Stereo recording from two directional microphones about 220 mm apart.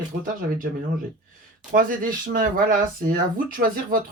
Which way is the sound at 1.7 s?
40° right (ahead or behind).